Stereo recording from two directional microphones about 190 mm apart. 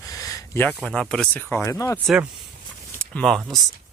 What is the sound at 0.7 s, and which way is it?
Speech, 5° left (ahead or behind).